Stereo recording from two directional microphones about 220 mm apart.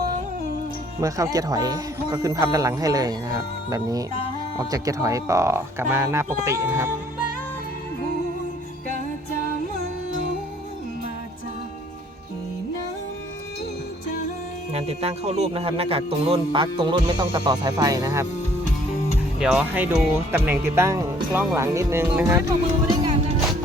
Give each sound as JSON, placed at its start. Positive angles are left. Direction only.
{"t": 1.0, "sound": "speech", "side_deg": -15}
{"t": 14.7, "sound": "speech", "side_deg": -30}
{"t": 19.4, "sound": "speech", "side_deg": -5}
{"t": 22.9, "sound": "music", "side_deg": -20}